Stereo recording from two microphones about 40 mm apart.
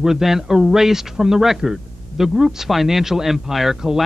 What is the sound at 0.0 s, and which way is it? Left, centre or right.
Speech, centre.